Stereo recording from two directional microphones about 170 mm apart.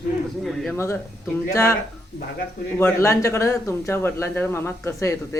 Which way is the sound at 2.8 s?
15° left (ahead or behind).